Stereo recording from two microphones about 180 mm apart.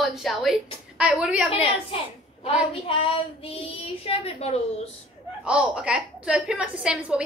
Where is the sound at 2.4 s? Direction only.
30° left (ahead or behind).